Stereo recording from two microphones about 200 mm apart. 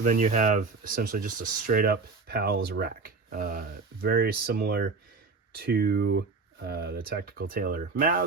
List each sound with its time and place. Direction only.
0.0 s speech: 40° right (ahead or behind)